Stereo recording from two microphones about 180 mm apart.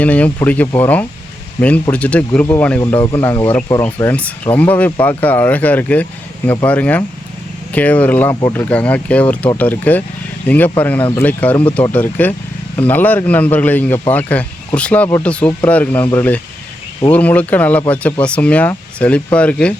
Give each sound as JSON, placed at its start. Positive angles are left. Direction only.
{"t": 0.0, "sound": "speech", "side_deg": 10}
{"t": 8.7, "sound": "speech", "side_deg": 5}